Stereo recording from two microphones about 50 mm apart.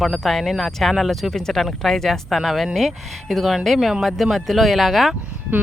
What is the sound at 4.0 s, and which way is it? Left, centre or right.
Speech, centre.